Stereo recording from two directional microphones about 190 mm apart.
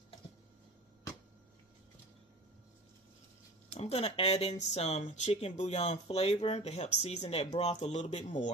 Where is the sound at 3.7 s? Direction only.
35° left (ahead or behind).